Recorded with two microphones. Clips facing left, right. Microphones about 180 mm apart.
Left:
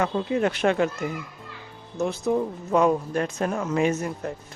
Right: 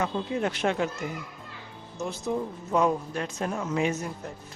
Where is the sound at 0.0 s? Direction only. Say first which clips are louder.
Left 5 dB; 70° left (ahead or behind).